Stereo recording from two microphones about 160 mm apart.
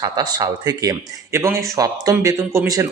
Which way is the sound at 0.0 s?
25° right (ahead or behind).